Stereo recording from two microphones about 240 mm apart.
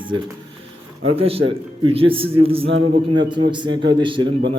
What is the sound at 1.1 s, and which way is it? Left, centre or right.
A man's voice, right.